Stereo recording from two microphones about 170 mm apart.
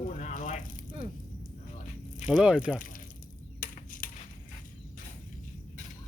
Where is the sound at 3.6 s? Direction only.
55° left (ahead or behind).